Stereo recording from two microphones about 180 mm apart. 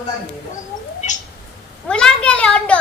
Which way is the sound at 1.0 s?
45° left (ahead or behind).